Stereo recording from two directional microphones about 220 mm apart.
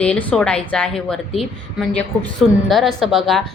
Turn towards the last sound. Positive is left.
turn(degrees=0)  # may be behind; listen again after turning